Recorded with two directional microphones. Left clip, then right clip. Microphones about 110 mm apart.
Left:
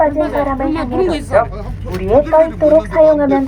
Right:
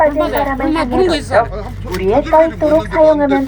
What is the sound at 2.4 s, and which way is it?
Speech, 35° left (ahead or behind).